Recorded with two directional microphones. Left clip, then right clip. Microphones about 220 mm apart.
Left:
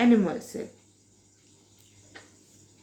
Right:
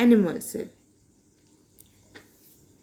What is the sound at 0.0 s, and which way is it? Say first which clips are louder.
Speech: right 2 dB; 50° right (ahead or behind).